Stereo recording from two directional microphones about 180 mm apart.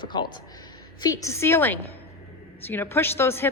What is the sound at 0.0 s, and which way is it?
A woman's voice, 25° left (ahead or behind).